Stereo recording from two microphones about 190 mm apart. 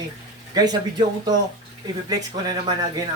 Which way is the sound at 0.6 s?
20° right (ahead or behind).